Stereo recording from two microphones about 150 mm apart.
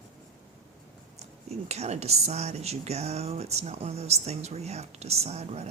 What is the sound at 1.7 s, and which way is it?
Speech, 45° right (ahead or behind).